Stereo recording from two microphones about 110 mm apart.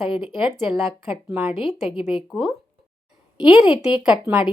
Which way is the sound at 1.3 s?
20° right (ahead or behind).